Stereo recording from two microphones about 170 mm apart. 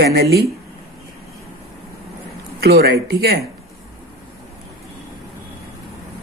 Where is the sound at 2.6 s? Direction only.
65° right (ahead or behind).